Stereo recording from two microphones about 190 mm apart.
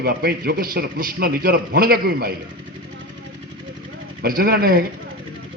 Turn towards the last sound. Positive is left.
turn(degrees=-50)  # may be behind; listen again after turning